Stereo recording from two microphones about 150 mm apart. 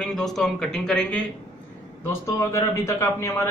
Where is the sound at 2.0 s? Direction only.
20° left (ahead or behind).